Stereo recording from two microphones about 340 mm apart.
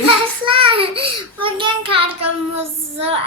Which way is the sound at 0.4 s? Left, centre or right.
Centre.